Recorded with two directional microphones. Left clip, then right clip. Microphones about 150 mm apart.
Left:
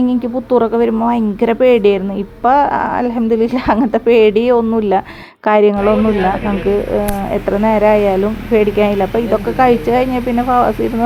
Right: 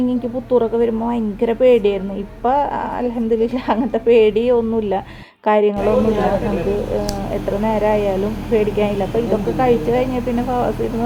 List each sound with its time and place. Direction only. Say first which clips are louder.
0.1 s a woman's voice: left 3 dB; 40° left (ahead or behind)
7.6 s a woman's voice: left 6 dB; 40° left (ahead or behind)